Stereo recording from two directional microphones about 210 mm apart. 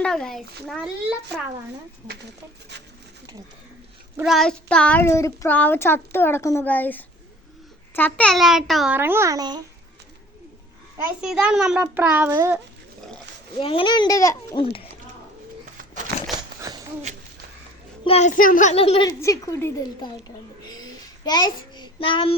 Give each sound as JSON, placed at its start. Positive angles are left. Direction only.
{"t": 0.0, "sound": "a child's voice", "side_deg": 5}
{"t": 4.2, "sound": "a child's voice", "side_deg": 0}
{"t": 10.9, "sound": "a child's voice", "side_deg": -5}
{"t": 13.6, "sound": "a child's voice", "side_deg": 25}
{"t": 16.6, "sound": "a sound", "side_deg": -15}
{"t": 18.0, "sound": "a child's voice", "side_deg": 30}
{"t": 19.2, "sound": "a child's voice", "side_deg": 15}
{"t": 20.7, "sound": "child singing", "side_deg": 20}